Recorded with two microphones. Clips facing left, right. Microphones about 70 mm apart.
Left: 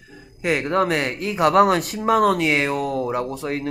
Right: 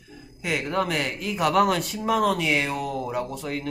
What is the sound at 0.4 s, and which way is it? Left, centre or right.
Speech, left.